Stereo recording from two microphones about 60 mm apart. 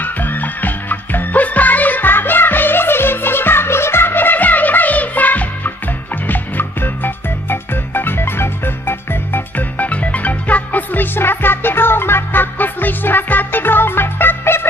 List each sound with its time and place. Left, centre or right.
0.0 s music: left